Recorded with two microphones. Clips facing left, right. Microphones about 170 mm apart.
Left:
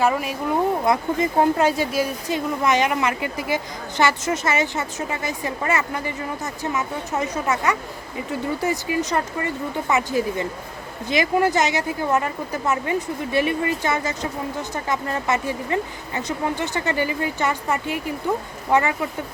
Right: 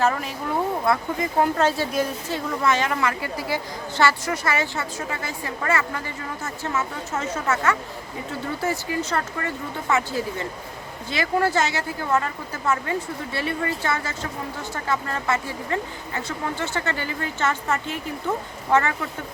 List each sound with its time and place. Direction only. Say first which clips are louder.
0.0 s a woman's voice: left 2 dB; 10° left (ahead or behind)
0.9 s a woman's voice: left 3 dB; 25° left (ahead or behind)